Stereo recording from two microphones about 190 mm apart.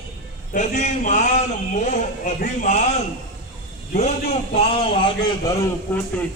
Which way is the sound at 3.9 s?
35° left (ahead or behind).